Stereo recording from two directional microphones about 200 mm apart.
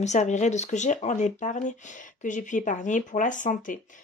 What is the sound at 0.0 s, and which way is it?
Speech, 35° left (ahead or behind).